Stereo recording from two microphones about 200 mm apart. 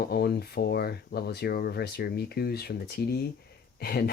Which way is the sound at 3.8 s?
50° left (ahead or behind).